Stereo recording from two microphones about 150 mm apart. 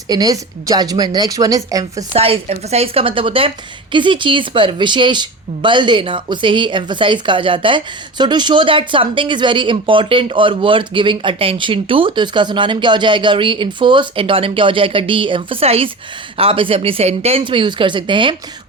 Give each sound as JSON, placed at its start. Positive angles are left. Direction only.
{"t": 0.1, "sound": "a woman's voice", "side_deg": -25}
{"t": 2.1, "sound": "speech", "side_deg": -40}